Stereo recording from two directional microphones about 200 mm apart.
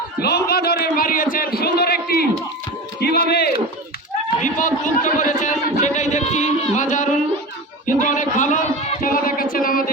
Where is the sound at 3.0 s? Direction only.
50° left (ahead or behind).